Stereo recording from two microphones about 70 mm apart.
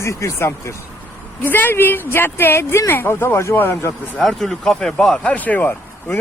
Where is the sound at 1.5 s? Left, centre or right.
Left.